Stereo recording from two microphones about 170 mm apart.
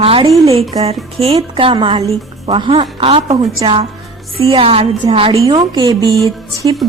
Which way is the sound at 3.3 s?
25° right (ahead or behind).